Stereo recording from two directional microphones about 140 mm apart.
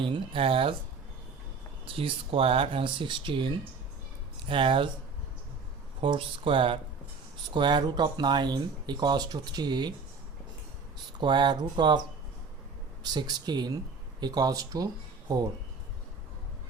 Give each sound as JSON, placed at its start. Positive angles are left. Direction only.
{"t": 0.0, "sound": "speech", "side_deg": -40}
{"t": 1.8, "sound": "speech", "side_deg": -40}
{"t": 6.0, "sound": "speech", "side_deg": -40}
{"t": 11.2, "sound": "speech", "side_deg": -35}
{"t": 13.1, "sound": "speech", "side_deg": -30}